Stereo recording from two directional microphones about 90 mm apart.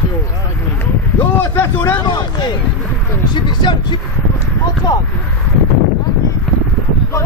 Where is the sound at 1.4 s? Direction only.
25° left (ahead or behind).